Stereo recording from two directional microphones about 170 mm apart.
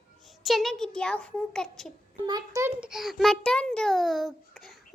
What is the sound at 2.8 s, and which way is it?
A child's voice, 5° right (ahead or behind).